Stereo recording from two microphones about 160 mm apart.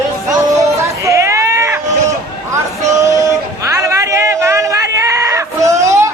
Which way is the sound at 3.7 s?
20° right (ahead or behind).